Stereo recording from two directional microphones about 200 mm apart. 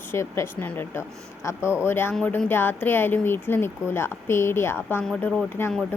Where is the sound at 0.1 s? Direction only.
15° left (ahead or behind).